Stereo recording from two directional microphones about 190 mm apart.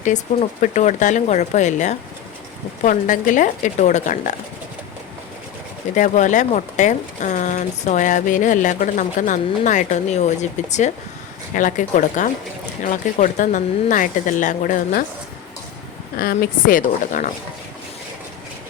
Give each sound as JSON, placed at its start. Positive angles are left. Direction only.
{"t": 0.0, "sound": "speech", "side_deg": 40}
{"t": 5.9, "sound": "speech", "side_deg": 40}
{"t": 16.1, "sound": "speech", "side_deg": 55}